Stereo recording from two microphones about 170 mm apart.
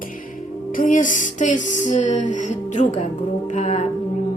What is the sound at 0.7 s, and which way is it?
Music, 50° left (ahead or behind).